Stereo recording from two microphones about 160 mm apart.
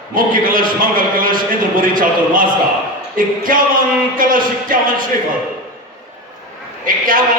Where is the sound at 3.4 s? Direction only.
60° right (ahead or behind).